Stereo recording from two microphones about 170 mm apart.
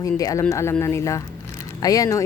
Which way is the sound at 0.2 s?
20° left (ahead or behind).